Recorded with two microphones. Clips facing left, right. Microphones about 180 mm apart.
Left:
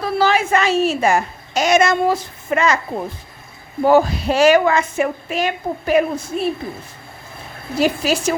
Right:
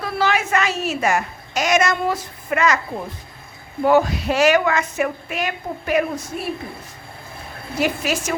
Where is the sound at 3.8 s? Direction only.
35° left (ahead or behind).